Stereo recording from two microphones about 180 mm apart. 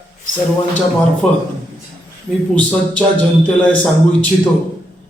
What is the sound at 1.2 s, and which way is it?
Speech, 5° left (ahead or behind).